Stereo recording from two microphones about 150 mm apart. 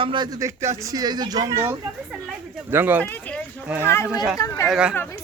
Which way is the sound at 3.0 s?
10° left (ahead or behind).